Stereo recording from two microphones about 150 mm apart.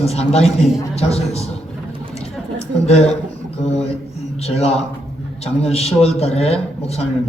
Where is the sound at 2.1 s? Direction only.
45° left (ahead or behind).